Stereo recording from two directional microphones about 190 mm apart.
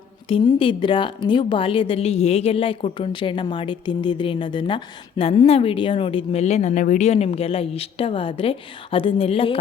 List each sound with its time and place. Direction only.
0.3 s a woman's voice: 30° left (ahead or behind)